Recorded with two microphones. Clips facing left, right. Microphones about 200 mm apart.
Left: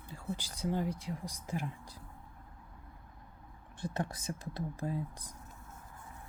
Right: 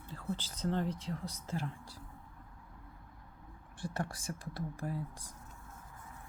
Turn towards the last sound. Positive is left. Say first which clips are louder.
# left 2 dB
turn(degrees=20)  # may be behind; listen again after turning